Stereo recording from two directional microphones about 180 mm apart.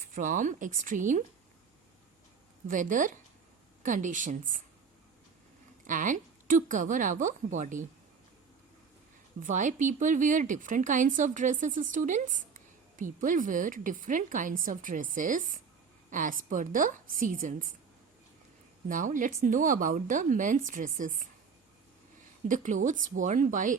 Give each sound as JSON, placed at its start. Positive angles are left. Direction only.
{"t": 0.1, "sound": "a woman's voice", "side_deg": -45}
{"t": 2.6, "sound": "a woman's voice", "side_deg": -45}
{"t": 5.8, "sound": "a woman's voice", "side_deg": -45}
{"t": 9.4, "sound": "a woman's voice", "side_deg": -45}
{"t": 18.9, "sound": "a woman's voice", "side_deg": -45}
{"t": 22.4, "sound": "a woman's voice", "side_deg": -45}